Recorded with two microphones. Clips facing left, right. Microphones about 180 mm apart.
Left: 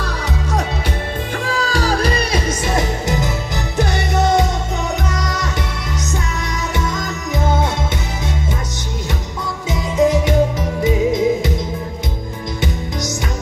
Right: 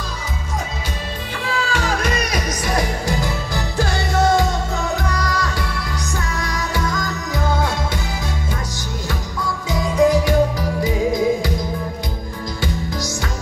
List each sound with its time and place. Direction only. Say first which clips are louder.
1.4 s music: left 2 dB; 40° left (ahead or behind); by 5.5 s 20° left (ahead or behind)
6.7 s music: left 1 dB; 20° left (ahead or behind)
9.7 s music: even; 20° left (ahead or behind)